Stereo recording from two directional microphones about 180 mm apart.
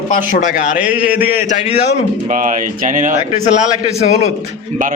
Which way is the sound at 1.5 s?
40° left (ahead or behind).